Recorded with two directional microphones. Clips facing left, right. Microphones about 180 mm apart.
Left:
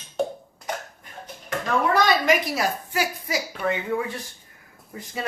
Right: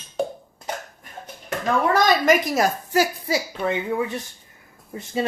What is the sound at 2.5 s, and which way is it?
Speech, 40° right (ahead or behind).